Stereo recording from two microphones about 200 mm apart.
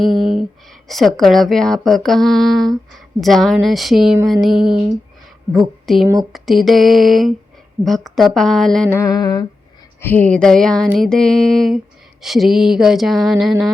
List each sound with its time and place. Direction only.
0.0 s a sound: centre (ahead or behind)
0.9 s speech: centre (ahead or behind)
9.0 s humming: 20° left (ahead or behind)
10.0 s speech: 10° left (ahead or behind)